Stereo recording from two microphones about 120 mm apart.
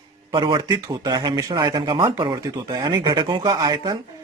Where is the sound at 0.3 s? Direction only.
40° right (ahead or behind).